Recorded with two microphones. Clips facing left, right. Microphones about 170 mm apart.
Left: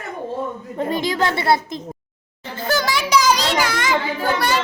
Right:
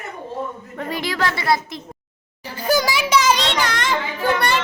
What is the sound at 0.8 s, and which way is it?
Speech, 20° left (ahead or behind).